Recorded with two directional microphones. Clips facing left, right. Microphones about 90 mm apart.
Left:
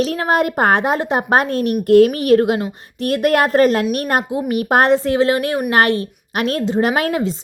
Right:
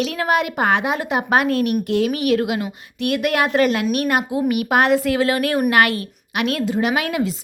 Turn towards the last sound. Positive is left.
turn(degrees=35)  # may be behind; listen again after turning